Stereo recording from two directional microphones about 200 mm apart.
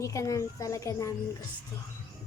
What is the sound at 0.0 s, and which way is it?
A child's voice, 15° left (ahead or behind).